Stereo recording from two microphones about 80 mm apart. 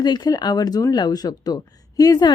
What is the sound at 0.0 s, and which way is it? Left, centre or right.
Speech, left.